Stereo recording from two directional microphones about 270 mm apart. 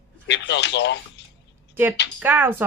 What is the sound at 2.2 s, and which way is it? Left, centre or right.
Speech, centre.